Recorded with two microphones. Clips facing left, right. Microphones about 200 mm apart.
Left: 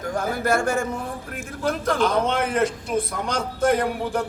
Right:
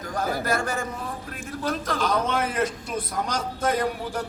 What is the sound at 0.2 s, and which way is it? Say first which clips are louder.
A man's voice: left 3 dB; 50° left (ahead or behind).